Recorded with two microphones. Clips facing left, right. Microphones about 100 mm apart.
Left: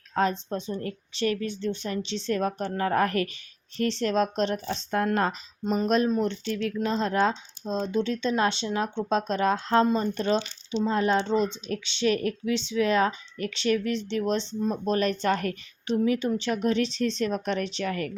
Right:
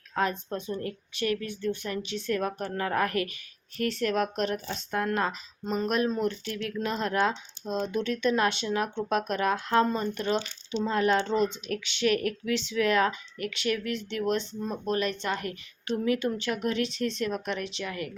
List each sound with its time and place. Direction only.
0.1 s a woman's voice: 25° left (ahead or behind)
14.9 s speech: 40° left (ahead or behind)
15.9 s a woman's voice: 25° left (ahead or behind); by 18.1 s 45° left (ahead or behind)